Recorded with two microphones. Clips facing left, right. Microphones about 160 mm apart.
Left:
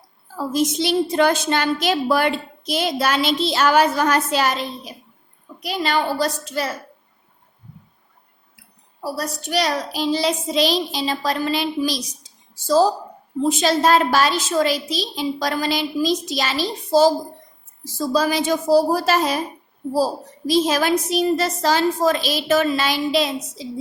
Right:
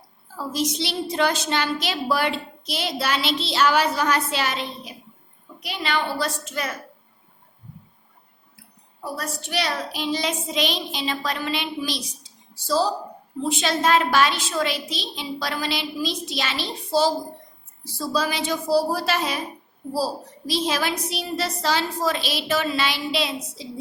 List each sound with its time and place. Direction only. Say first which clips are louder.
0.3 s a woman's voice: left 5 dB; 50° left (ahead or behind); by 6.7 s 35° left (ahead or behind)
9.0 s a woman's voice: left 5 dB; 35° left (ahead or behind)
20.5 s a woman's voice: left 7 dB; 45° left (ahead or behind)